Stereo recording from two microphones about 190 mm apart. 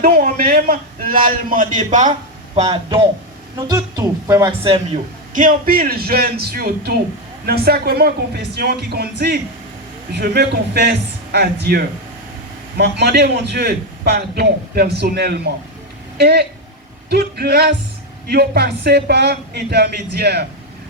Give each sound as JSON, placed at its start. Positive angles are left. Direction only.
{"t": 0.0, "sound": "a man's voice", "side_deg": -45}
{"t": 3.7, "sound": "speech", "side_deg": -20}
{"t": 5.3, "sound": "a man's voice", "side_deg": -45}